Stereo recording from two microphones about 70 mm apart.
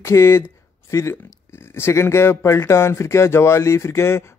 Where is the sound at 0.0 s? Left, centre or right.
Left.